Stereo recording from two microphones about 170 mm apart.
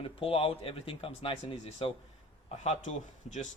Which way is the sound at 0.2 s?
30° left (ahead or behind).